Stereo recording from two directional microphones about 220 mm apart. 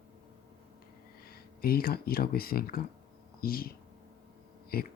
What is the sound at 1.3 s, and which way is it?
Speech, 45° left (ahead or behind).